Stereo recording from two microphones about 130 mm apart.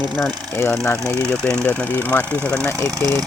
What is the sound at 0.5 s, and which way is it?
Speech, 20° left (ahead or behind).